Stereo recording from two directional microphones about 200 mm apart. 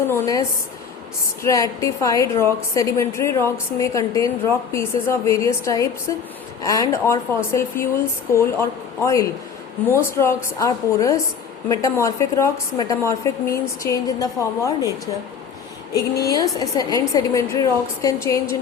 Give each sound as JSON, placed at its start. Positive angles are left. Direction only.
{"t": 0.1, "sound": "a woman's voice", "side_deg": 15}
{"t": 16.3, "sound": "a woman's voice", "side_deg": 15}